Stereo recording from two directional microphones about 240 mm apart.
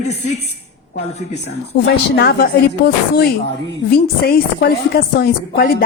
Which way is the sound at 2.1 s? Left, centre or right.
Left.